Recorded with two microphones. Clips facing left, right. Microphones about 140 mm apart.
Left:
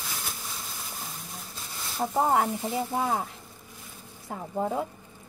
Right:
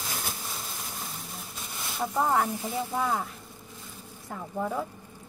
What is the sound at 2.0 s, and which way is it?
Speech, 30° left (ahead or behind).